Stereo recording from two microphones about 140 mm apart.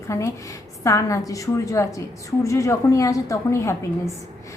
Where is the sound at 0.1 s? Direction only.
20° left (ahead or behind).